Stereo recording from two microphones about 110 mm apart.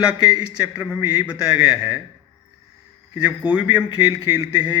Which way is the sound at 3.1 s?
15° right (ahead or behind).